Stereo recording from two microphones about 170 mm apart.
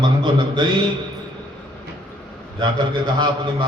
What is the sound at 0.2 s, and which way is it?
Mantra, 25° right (ahead or behind).